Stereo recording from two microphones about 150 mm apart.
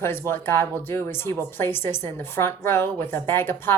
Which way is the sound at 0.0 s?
15° left (ahead or behind).